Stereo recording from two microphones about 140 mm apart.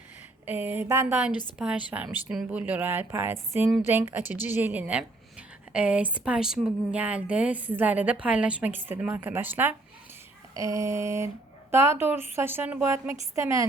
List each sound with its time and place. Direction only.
0.4 s a woman's voice: 15° right (ahead or behind)
1.3 s a woman's voice: 30° left (ahead or behind)
1.5 s a woman's voice: 10° right (ahead or behind)